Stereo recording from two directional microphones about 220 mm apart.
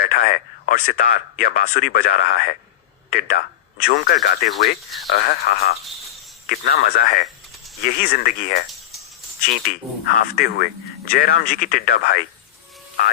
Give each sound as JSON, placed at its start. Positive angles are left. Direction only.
{"t": 0.0, "sound": "speech", "side_deg": 40}
{"t": 10.2, "sound": "speech", "side_deg": 45}